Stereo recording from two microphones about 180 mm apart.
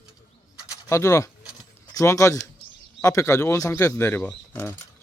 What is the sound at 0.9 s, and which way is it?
Speech, 15° left (ahead or behind).